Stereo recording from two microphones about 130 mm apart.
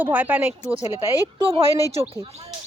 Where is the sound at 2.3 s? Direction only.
50° right (ahead or behind).